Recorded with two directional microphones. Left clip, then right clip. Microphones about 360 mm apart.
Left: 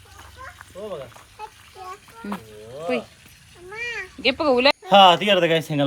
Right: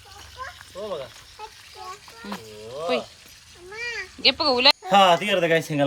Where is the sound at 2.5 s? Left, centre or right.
Right.